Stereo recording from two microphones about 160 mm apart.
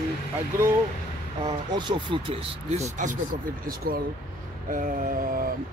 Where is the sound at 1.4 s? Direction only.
30° right (ahead or behind).